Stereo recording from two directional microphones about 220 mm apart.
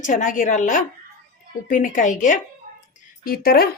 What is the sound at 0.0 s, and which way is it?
A woman's voice, 35° left (ahead or behind).